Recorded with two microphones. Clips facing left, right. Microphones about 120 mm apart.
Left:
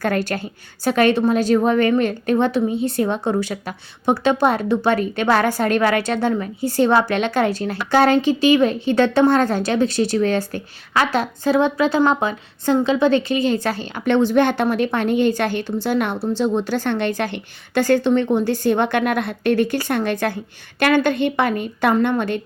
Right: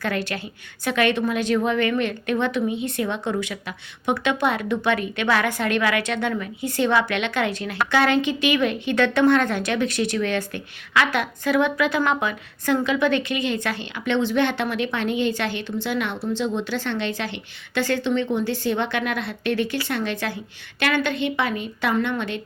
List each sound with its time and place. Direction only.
0.0 s a woman's voice: 45° left (ahead or behind)